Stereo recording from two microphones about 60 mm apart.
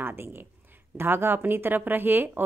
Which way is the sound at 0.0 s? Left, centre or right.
Right.